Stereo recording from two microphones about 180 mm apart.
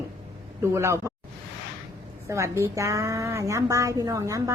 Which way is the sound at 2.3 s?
15° right (ahead or behind).